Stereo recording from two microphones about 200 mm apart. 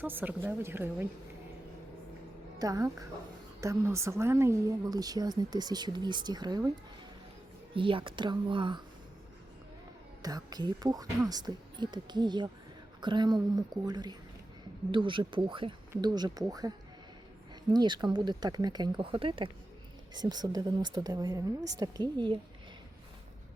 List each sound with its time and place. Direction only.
0.0 s a woman's voice: 10° right (ahead or behind)
2.6 s a woman's voice: 15° right (ahead or behind)
7.7 s speech: 25° right (ahead or behind)
10.2 s speech: 20° right (ahead or behind)